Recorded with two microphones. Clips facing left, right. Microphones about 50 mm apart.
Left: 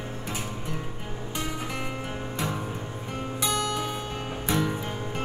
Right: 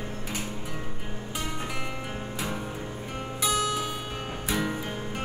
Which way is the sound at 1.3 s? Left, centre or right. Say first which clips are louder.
Left 1 dB; centre.